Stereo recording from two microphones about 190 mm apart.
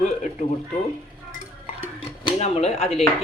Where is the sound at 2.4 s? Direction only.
35° left (ahead or behind).